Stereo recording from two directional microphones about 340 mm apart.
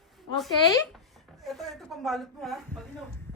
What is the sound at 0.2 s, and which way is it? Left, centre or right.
A woman's voice, centre.